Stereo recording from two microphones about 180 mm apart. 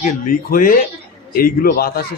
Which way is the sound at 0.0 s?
50° left (ahead or behind).